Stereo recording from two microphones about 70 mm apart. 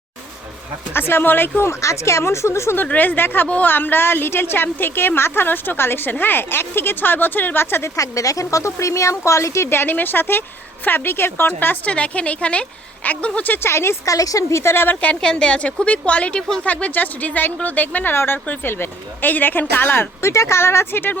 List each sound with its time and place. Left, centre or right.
0.9 s a woman's voice: left
2.8 s a woman's voice: left
7.9 s a woman's voice: left
14.1 s speech: left
15.0 s a woman's voice: centre; by 18.3 s left
18.4 s a woman's voice: left
18.7 s a woman's voice: left
20.3 s a woman's voice: left